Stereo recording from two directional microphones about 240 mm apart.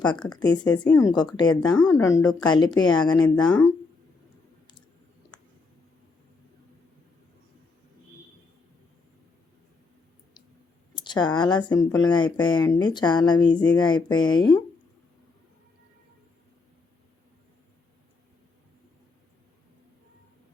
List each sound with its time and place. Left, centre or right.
0.7 s speech: centre
3.3 s speech: centre
10.9 s speech: centre